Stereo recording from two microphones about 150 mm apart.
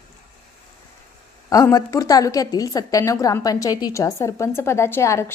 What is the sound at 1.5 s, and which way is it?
A woman's voice, 20° left (ahead or behind).